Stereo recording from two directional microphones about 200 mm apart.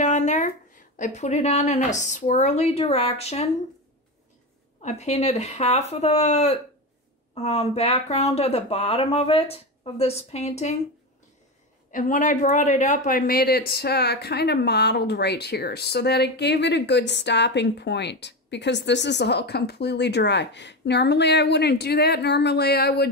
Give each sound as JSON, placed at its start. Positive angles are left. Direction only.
{"t": 0.0, "sound": "a woman's voice", "side_deg": 35}
{"t": 4.8, "sound": "a woman's voice", "side_deg": 35}
{"t": 11.9, "sound": "speech", "side_deg": 40}